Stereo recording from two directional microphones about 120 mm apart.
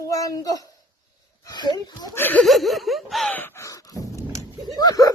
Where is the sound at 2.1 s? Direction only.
15° left (ahead or behind).